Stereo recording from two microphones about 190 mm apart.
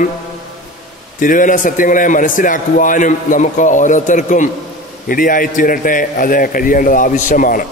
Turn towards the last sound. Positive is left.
turn(degrees=45)  # may be behind; listen again after turning